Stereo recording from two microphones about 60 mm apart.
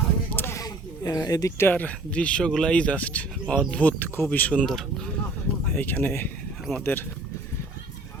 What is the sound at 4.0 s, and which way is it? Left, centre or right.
Speech, left.